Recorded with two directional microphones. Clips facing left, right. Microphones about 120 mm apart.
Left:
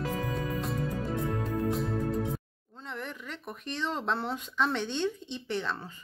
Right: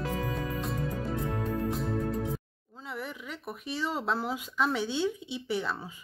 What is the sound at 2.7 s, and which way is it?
Speech, 5° right (ahead or behind).